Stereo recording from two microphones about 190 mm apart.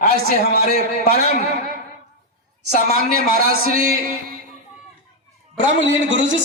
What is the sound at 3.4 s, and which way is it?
Speech, 50° right (ahead or behind).